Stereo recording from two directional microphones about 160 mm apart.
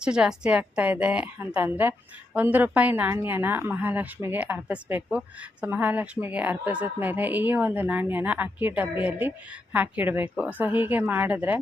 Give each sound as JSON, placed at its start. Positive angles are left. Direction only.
{"t": 0.0, "sound": "a woman's voice", "side_deg": -5}